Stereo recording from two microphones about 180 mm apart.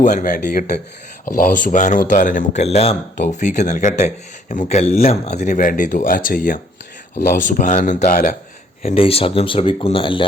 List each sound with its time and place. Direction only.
0.0 s speech: 45° left (ahead or behind)
8.8 s speech: 35° left (ahead or behind)